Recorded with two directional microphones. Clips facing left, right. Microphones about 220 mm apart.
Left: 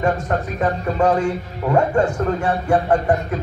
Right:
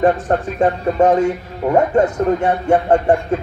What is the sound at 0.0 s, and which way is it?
Speech, 30° right (ahead or behind).